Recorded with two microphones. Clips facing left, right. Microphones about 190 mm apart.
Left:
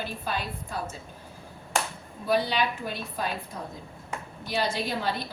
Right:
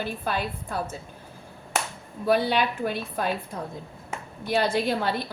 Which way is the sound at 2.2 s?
55° right (ahead or behind).